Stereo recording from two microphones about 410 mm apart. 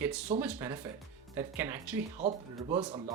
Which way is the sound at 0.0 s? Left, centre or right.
Centre.